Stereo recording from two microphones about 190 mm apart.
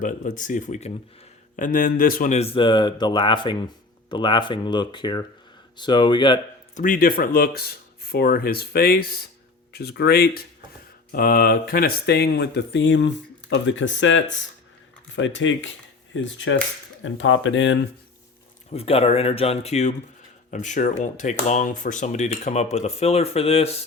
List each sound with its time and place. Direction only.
0.0 s a man's voice: 40° left (ahead or behind); by 6.4 s 25° left (ahead or behind)
6.7 s speech: 45° left (ahead or behind); by 16.6 s 75° left (ahead or behind)
17.0 s speech: 85° left
18.7 s speech: 30° left (ahead or behind)